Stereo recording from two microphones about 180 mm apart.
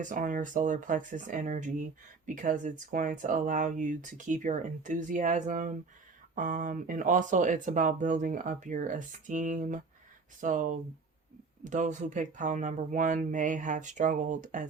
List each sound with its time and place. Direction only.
0.0 s speech: 45° right (ahead or behind)